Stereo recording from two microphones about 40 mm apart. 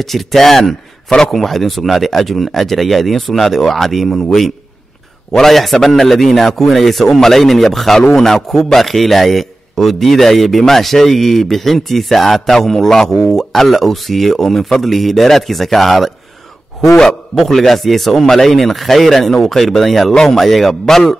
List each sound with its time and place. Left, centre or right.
0.0 s a man's voice: centre
16.9 s a man's voice: centre
17.4 s speech: centre